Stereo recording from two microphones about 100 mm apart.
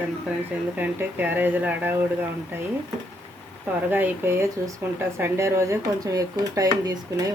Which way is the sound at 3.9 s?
20° right (ahead or behind).